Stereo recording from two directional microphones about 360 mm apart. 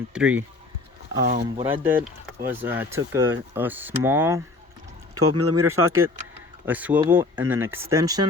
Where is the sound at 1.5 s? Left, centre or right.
Centre.